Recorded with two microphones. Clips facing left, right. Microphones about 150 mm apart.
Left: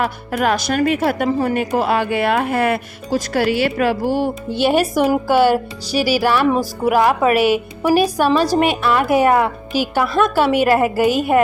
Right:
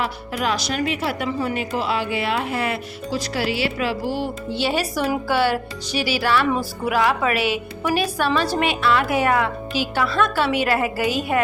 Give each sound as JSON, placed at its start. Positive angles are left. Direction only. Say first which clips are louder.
{"t": 0.0, "sound": "speech", "louder": "left 5 dB", "side_deg": 50}